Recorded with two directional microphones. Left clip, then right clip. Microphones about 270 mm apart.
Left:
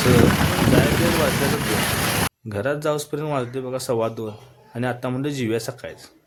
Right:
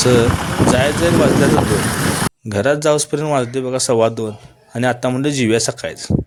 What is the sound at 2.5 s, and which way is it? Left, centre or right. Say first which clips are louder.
A man's voice: right 10 dB; left.